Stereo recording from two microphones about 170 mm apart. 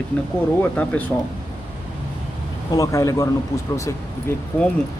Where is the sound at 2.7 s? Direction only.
20° left (ahead or behind).